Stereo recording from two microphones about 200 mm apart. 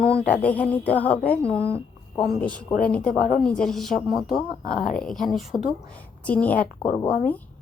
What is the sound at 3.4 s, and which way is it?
Speech, 5° left (ahead or behind).